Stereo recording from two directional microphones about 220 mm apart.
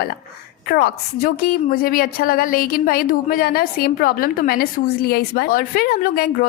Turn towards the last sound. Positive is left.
turn(degrees=40)  # may be behind; listen again after turning